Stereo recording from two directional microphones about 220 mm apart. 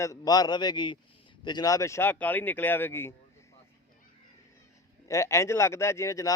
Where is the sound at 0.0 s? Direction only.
15° left (ahead or behind).